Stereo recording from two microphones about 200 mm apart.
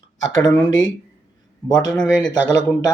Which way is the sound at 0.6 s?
20° left (ahead or behind).